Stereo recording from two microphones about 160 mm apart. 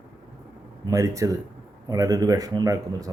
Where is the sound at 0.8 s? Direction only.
20° right (ahead or behind).